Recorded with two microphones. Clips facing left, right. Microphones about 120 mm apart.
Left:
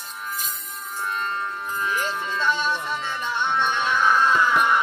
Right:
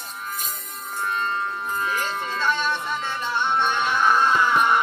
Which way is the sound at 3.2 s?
35° right (ahead or behind).